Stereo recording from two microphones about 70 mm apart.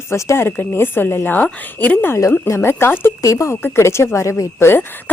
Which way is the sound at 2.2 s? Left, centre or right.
Left.